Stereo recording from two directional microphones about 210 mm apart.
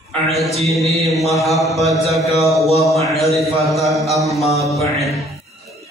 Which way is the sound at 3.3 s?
Centre (ahead or behind).